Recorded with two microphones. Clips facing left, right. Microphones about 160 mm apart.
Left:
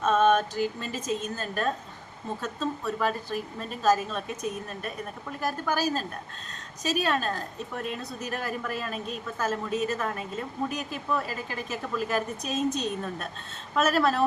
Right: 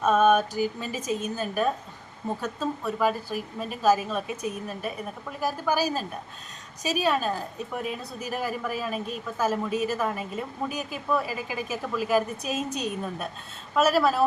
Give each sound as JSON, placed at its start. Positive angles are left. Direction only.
{"t": 0.0, "sound": "a woman's voice", "side_deg": -10}